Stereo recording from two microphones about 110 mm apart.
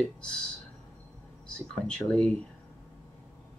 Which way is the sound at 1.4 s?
10° left (ahead or behind).